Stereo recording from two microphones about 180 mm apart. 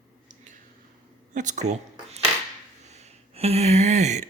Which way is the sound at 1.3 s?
45° right (ahead or behind).